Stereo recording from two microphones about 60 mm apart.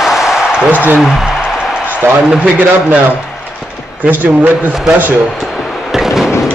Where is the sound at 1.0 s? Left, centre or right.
Centre.